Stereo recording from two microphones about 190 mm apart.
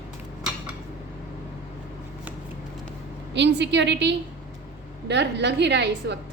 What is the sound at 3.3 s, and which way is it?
A woman's voice, 65° right (ahead or behind).